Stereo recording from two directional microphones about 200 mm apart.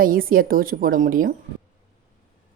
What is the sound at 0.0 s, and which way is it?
Speech, 45° right (ahead or behind).